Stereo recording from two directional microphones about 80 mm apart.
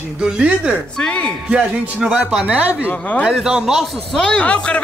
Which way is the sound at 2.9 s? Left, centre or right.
Centre.